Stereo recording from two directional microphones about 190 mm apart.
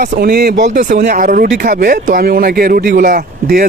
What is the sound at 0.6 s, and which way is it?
Speech, 40° right (ahead or behind).